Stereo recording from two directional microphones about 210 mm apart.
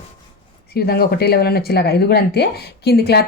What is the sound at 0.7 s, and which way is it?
Speech, 45° left (ahead or behind).